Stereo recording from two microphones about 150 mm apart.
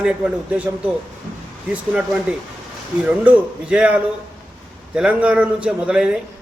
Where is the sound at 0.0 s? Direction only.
5° right (ahead or behind).